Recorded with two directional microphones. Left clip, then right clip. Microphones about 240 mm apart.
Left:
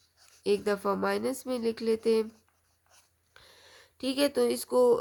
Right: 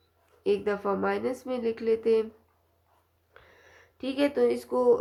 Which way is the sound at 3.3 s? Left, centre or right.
Left.